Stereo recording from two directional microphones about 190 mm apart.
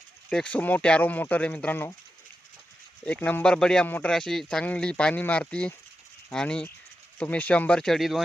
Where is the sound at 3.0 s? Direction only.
5° left (ahead or behind).